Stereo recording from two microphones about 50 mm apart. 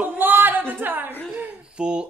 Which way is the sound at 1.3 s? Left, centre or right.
Right.